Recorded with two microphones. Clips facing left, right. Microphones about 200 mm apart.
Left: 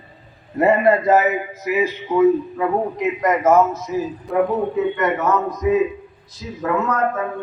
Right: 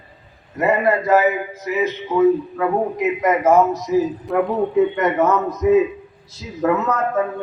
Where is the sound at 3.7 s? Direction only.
35° right (ahead or behind).